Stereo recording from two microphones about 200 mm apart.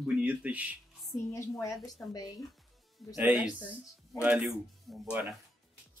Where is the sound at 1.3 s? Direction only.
15° left (ahead or behind).